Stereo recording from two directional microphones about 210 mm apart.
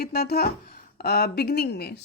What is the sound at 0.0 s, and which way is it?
Speech, 50° left (ahead or behind).